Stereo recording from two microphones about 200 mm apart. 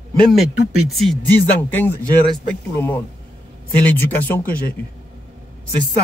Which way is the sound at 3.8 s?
10° left (ahead or behind).